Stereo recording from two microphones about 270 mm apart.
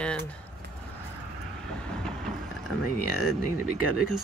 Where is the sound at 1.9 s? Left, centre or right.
Centre.